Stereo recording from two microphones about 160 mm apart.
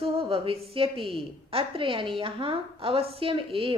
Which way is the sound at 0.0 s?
35° right (ahead or behind).